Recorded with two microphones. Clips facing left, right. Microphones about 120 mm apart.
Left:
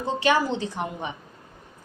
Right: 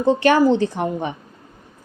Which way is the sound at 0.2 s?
50° right (ahead or behind).